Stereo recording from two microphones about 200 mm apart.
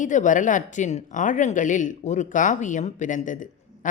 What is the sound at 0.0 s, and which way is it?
Speech, 40° left (ahead or behind).